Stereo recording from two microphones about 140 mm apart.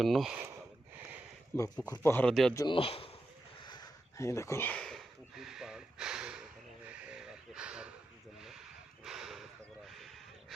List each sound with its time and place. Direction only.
0.0 s speech: centre (ahead or behind)
1.5 s speech: 20° left (ahead or behind)
2.2 s speech: centre (ahead or behind)
2.7 s a man's voice: 40° left (ahead or behind)
3.7 s a sound: 25° left (ahead or behind); by 7.9 s 5° right (ahead or behind)
9.0 s a sound: centre (ahead or behind)